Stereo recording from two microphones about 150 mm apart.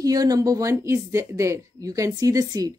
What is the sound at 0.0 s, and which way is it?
Speech, 25° right (ahead or behind).